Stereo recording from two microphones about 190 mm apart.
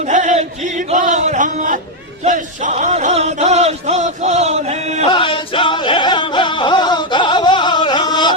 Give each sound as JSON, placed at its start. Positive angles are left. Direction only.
{"t": 0.0, "sound": "a sound", "side_deg": -40}
{"t": 2.2, "sound": "speech", "side_deg": -40}
{"t": 5.0, "sound": "music", "side_deg": 25}